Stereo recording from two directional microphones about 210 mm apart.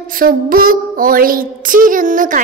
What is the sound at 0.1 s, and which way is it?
Child singing, 40° right (ahead or behind).